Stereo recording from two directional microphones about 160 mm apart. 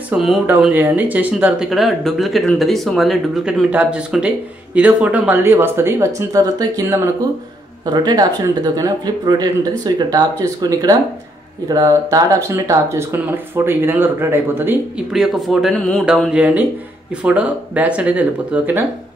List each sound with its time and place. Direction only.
0.1 s speech: centre (ahead or behind)
15.1 s speech: centre (ahead or behind)
16.3 s speech: 10° right (ahead or behind)